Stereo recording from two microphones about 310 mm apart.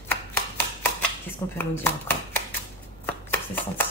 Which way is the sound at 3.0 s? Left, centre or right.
Centre.